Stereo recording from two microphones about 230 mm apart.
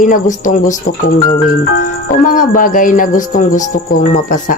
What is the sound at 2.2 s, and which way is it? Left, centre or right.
Speech, left.